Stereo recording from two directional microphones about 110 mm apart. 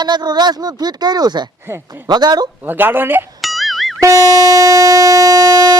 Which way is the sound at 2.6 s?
15° right (ahead or behind).